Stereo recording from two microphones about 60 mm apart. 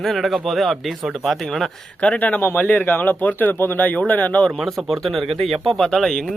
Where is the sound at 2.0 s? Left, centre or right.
Left.